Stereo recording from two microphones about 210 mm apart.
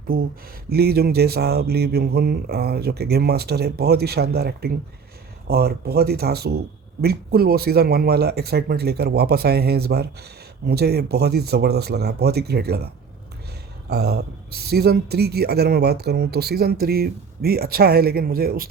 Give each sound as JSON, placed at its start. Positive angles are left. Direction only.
{"t": 0.1, "sound": "speech", "side_deg": -45}